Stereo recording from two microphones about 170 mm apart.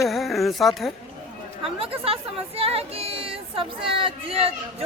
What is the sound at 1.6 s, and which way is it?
A woman's voice, 35° right (ahead or behind).